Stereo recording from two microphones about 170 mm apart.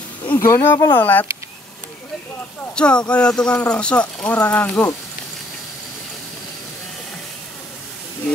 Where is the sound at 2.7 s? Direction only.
5° left (ahead or behind).